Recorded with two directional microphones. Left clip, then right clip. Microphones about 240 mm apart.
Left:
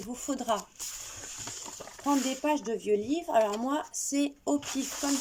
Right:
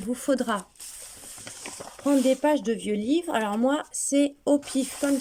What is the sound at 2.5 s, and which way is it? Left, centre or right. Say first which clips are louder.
Speech: right 3 dB; right.